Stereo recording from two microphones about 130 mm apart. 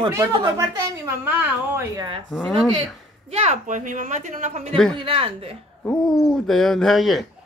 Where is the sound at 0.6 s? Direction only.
25° right (ahead or behind).